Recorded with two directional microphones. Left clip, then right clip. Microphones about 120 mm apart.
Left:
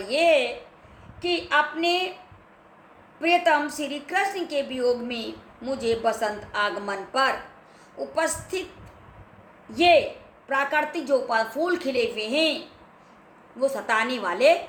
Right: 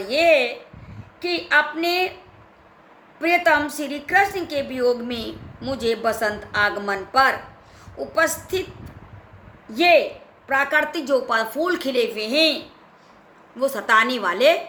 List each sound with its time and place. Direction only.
0.0 s a sound: 40° right (ahead or behind)
1.2 s a woman's voice: 45° right (ahead or behind)
3.2 s a woman's voice: 45° right (ahead or behind)
9.6 s a woman's voice: 45° right (ahead or behind)
13.6 s a woman's voice: 55° right (ahead or behind)